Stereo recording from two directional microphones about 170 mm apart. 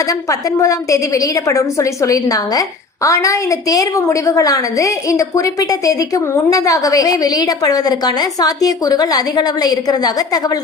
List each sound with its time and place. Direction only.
0.1 s a woman's voice: 20° left (ahead or behind)